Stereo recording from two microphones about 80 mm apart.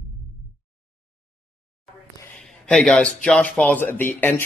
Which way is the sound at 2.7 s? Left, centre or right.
Centre.